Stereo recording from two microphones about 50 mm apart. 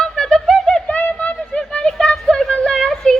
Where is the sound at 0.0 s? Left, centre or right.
Centre.